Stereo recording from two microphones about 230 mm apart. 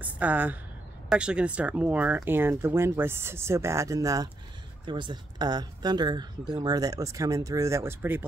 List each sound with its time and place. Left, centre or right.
0.0 s a woman's voice: centre